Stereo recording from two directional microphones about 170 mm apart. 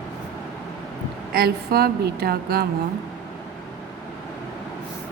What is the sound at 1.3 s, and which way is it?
A woman's voice, 65° right (ahead or behind).